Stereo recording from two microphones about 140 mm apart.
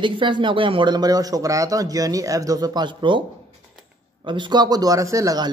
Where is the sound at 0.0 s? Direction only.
35° right (ahead or behind).